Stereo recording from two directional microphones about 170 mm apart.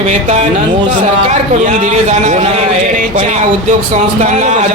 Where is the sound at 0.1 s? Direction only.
45° right (ahead or behind).